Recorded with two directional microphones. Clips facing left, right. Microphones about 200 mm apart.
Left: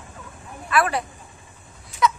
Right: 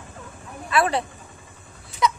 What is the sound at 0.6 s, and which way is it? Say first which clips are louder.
Vehicle: even; 25° right (ahead or behind).